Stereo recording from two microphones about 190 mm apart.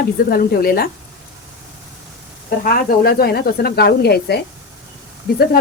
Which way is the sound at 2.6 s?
50° left (ahead or behind).